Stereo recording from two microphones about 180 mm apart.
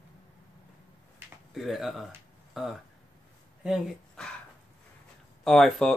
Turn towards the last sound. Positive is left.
turn(degrees=0)  # may be behind; listen again after turning